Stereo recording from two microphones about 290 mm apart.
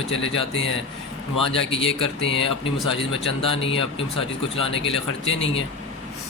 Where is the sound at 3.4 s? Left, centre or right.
Centre.